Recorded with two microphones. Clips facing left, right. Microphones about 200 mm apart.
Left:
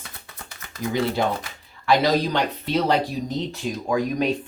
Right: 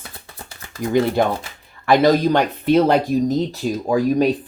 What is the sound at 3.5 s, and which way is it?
Speech, 35° right (ahead or behind).